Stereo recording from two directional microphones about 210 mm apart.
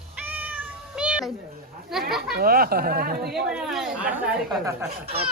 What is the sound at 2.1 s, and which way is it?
Speech, centre (ahead or behind).